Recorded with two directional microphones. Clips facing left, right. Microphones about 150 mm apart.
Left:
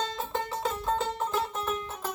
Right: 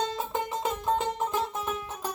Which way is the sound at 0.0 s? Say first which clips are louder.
Right 2 dB; 15° right (ahead or behind).